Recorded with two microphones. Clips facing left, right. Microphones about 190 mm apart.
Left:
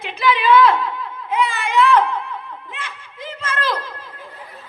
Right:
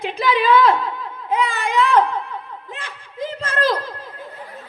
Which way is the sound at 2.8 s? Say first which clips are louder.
Right 8 dB; 35° right (ahead or behind).